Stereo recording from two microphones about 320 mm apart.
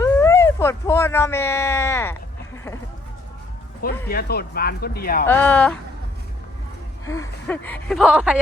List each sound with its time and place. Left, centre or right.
0.0 s a sound: centre
4.1 s speech: left
5.2 s speech: centre
7.0 s speech: centre